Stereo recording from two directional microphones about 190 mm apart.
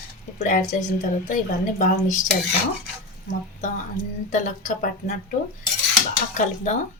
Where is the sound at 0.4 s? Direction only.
45° left (ahead or behind).